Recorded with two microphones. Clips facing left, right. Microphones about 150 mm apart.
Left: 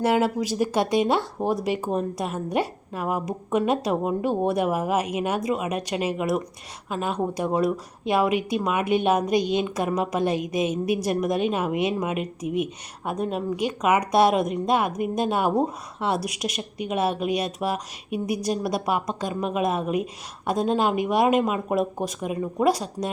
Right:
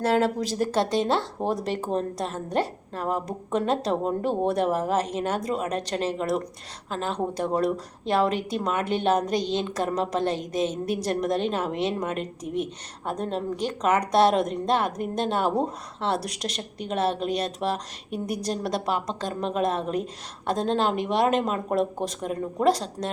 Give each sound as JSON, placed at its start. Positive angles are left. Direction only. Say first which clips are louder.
{"t": 0.0, "sound": "a woman's voice", "louder": "left 1 dB", "side_deg": 10}